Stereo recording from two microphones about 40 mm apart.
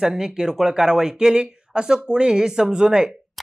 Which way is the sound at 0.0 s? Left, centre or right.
Centre.